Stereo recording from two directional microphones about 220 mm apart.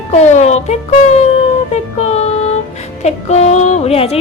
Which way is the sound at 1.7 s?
30° left (ahead or behind).